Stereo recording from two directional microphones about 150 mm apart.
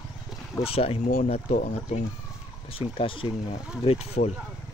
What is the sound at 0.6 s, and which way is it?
Speech, 40° left (ahead or behind).